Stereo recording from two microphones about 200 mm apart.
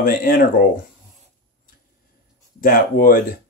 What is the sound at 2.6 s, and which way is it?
Speech, 45° left (ahead or behind).